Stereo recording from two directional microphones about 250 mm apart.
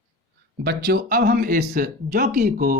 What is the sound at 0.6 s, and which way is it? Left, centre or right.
Speech, right.